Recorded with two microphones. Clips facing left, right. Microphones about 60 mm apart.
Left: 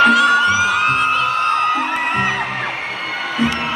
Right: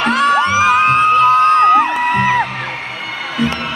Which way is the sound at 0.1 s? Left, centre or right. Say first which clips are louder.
Even; right.